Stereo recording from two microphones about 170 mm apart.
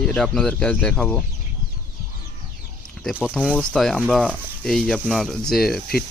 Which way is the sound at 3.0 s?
Centre (ahead or behind).